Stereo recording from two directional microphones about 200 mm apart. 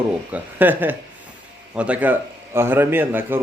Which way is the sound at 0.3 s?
10° right (ahead or behind).